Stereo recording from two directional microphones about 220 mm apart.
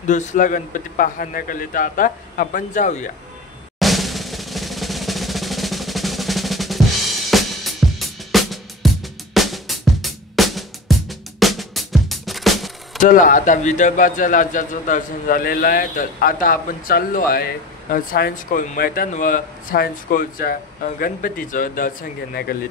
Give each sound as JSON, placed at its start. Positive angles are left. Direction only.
{"t": 0.0, "sound": "speech", "side_deg": 35}
{"t": 3.8, "sound": "drum roll", "side_deg": 0}
{"t": 7.2, "sound": "music", "side_deg": 0}
{"t": 13.0, "sound": "speech", "side_deg": 35}